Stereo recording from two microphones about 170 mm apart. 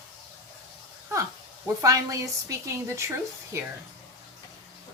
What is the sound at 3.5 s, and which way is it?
Speech, 15° right (ahead or behind).